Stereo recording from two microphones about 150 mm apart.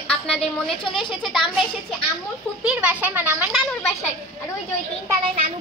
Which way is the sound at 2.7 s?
10° right (ahead or behind).